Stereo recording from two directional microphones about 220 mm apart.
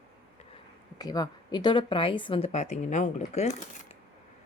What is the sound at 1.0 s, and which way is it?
A woman's voice, 20° left (ahead or behind).